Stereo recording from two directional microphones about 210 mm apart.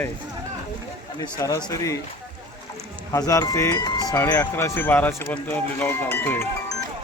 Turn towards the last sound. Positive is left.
turn(degrees=10)  # may be behind; listen again after turning